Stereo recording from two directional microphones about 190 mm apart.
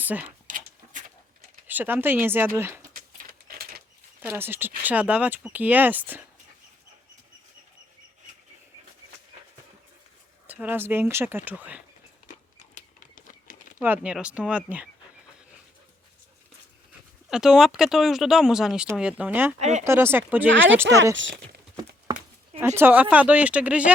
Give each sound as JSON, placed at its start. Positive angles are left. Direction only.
{"t": 0.0, "sound": "speech", "side_deg": -10}
{"t": 0.4, "sound": "pant", "side_deg": -45}
{"t": 1.6, "sound": "speech", "side_deg": -10}
{"t": 4.2, "sound": "speech", "side_deg": -10}
{"t": 10.4, "sound": "speech", "side_deg": -10}
{"t": 12.3, "sound": "a sound", "side_deg": 40}
{"t": 13.8, "sound": "speech", "side_deg": -10}
{"t": 17.2, "sound": "speech", "side_deg": -5}
{"t": 19.5, "sound": "speech", "side_deg": -35}
{"t": 19.8, "sound": "speech", "side_deg": -15}
{"t": 21.2, "sound": "speech", "side_deg": -75}
{"t": 21.8, "sound": "a sound", "side_deg": -25}
{"t": 22.6, "sound": "speech", "side_deg": -15}